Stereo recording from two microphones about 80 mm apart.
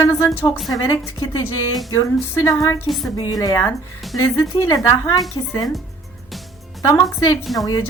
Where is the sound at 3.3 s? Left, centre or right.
Left.